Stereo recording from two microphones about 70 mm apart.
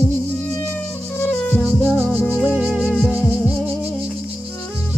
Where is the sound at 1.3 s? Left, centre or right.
Centre.